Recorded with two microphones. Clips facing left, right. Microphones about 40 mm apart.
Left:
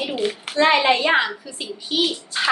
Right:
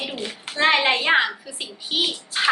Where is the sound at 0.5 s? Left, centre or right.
Centre.